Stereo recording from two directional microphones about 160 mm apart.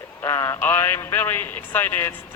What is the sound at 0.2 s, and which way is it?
Speech, 15° left (ahead or behind).